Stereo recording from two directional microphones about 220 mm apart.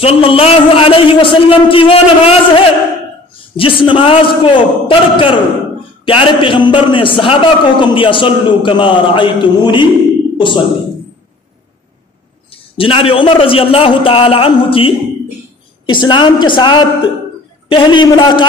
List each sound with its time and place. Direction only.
0.0 s a man's voice: 25° left (ahead or behind)
12.7 s a man's voice: 25° left (ahead or behind)